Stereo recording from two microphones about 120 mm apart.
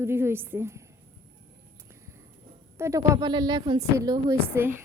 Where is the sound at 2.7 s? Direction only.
25° right (ahead or behind).